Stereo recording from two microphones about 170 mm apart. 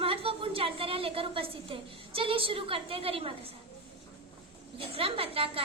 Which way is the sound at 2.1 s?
30° right (ahead or behind).